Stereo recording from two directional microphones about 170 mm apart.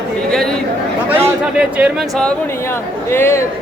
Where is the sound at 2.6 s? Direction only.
15° left (ahead or behind).